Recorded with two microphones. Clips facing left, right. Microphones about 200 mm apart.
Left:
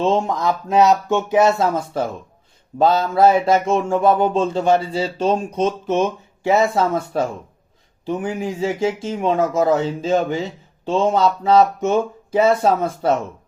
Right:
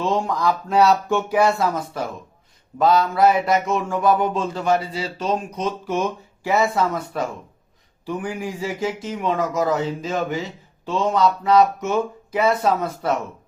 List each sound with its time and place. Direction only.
0.0 s mantra: 25° left (ahead or behind)